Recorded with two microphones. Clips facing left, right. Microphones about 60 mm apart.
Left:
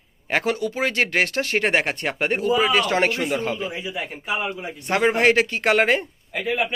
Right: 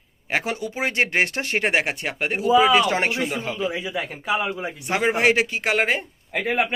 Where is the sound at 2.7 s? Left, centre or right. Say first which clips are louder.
Right 1 dB; centre.